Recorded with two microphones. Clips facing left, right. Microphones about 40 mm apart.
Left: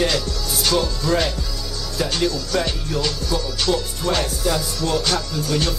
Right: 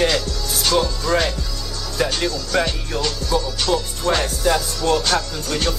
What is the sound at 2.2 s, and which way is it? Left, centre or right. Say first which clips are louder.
Music: right 1 dB; centre.